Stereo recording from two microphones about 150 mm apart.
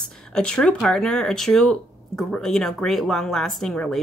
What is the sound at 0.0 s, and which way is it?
Speech, 5° left (ahead or behind).